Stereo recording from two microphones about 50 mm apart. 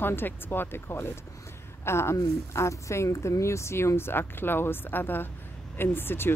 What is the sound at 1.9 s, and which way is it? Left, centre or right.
Speech, left.